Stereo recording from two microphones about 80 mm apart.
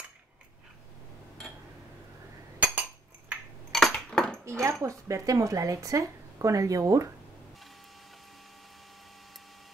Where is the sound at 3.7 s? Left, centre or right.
Centre.